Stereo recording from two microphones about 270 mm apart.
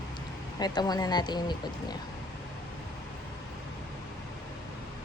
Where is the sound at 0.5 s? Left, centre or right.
Centre.